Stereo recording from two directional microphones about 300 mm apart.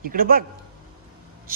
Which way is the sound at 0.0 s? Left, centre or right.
Right.